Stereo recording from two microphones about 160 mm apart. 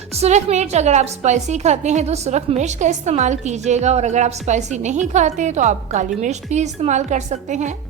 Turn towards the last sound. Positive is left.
turn(degrees=-50)  # may be behind; listen again after turning